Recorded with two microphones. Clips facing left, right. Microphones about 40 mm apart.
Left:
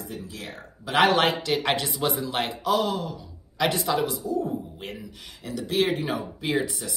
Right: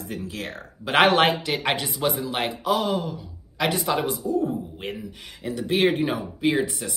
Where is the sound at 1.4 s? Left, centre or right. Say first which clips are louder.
Left 1 dB; centre.